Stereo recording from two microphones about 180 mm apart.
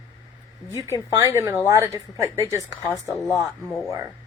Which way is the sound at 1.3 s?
15° right (ahead or behind).